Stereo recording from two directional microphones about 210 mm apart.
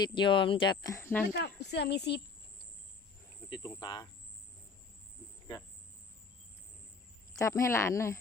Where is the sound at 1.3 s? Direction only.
50° left (ahead or behind).